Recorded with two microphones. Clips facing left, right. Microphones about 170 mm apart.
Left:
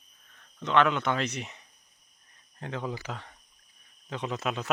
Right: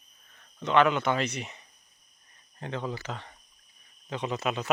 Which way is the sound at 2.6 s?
5° left (ahead or behind).